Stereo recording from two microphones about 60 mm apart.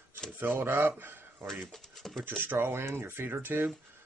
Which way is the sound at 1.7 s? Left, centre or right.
Centre.